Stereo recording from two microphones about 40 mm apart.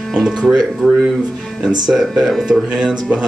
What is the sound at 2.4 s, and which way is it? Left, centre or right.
Speech, centre.